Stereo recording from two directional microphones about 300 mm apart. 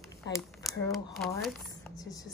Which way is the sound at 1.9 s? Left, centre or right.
Centre.